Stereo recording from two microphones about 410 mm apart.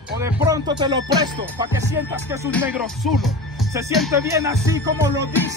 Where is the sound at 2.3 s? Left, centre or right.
Centre.